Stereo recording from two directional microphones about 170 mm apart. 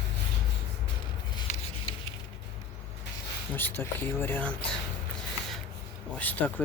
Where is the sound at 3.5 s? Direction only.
10° left (ahead or behind).